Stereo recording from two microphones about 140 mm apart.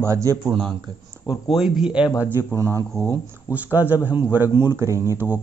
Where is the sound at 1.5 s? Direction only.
5° right (ahead or behind).